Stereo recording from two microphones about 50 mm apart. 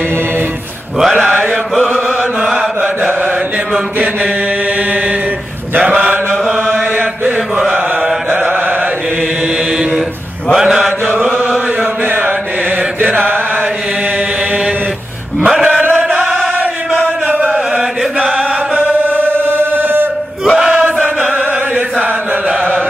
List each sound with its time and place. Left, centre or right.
1.8 s mantra: centre
2.8 s mantra: right
5.8 s mantra: right
7.5 s mantra: centre
10.6 s chant: centre
12.1 s mantra: right
15.4 s chant: centre
19.0 s chant: right
20.7 s chant: right